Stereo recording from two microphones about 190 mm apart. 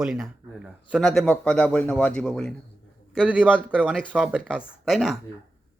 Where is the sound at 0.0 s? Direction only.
Centre (ahead or behind).